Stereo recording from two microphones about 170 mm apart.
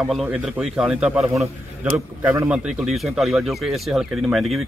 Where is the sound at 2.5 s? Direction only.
Centre (ahead or behind).